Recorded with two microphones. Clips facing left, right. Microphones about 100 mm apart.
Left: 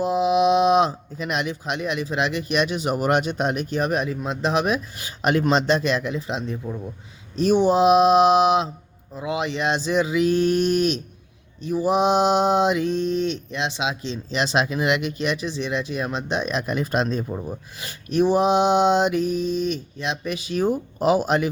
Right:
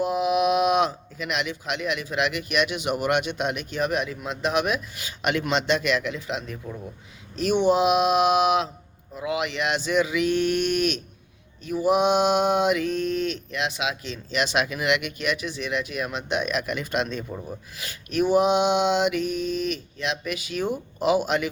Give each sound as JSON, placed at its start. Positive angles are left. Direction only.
{"t": 0.0, "sound": "mantra", "side_deg": 30}